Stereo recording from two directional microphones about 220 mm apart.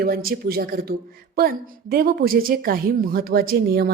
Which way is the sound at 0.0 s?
40° right (ahead or behind).